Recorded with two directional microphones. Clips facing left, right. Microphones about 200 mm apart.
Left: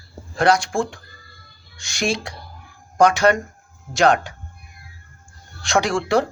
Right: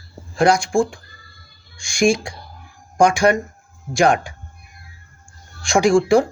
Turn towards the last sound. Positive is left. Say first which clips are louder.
# right 5 dB
turn(degrees=-10)  # may be behind; listen again after turning